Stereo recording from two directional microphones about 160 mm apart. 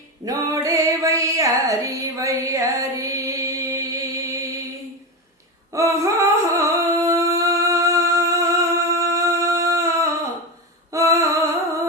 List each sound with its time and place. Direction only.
0.3 s music: 20° right (ahead or behind)
5.7 s humming: 20° right (ahead or behind)
10.9 s music: 20° right (ahead or behind)